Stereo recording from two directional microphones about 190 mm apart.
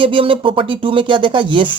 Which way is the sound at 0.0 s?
25° right (ahead or behind).